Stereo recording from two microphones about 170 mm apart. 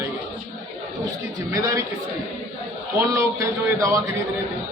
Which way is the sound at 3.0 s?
20° right (ahead or behind).